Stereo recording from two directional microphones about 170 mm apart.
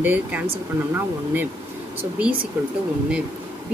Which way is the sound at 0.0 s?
10° right (ahead or behind).